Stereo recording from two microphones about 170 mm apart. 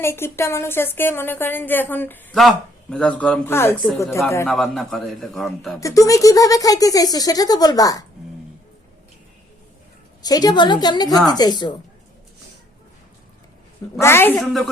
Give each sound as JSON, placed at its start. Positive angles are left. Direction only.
{"t": 0.0, "sound": "speech", "side_deg": 15}
{"t": 4.4, "sound": "a man's voice", "side_deg": 0}
{"t": 5.8, "sound": "speech", "side_deg": 20}
{"t": 10.2, "sound": "speech", "side_deg": 25}
{"t": 14.0, "sound": "speech", "side_deg": 15}
{"t": 14.4, "sound": "a man's voice", "side_deg": 0}